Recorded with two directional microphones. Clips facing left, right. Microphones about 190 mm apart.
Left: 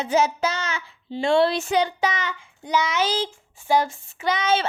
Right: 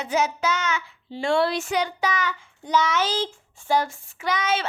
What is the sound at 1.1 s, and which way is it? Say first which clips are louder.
A child's voice: left 3 dB; 20° left (ahead or behind).